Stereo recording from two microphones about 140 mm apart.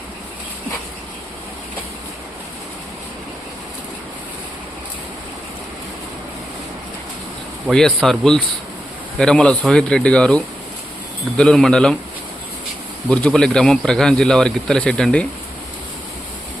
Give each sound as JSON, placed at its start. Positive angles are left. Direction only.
{"t": 7.7, "sound": "a man's voice", "side_deg": 5}
{"t": 13.1, "sound": "a man's voice", "side_deg": 5}